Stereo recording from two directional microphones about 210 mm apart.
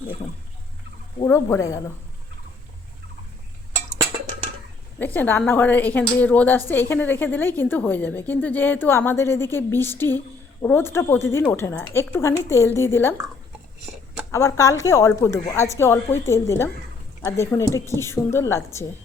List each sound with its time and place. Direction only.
1.2 s a woman's voice: 15° left (ahead or behind)
4.9 s a woman's voice: 10° left (ahead or behind)
14.3 s a woman's voice: 15° left (ahead or behind)